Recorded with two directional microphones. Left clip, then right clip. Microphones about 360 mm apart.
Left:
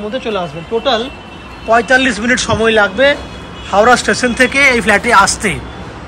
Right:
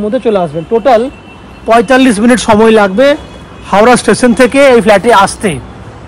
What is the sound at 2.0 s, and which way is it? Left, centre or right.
Speech, centre.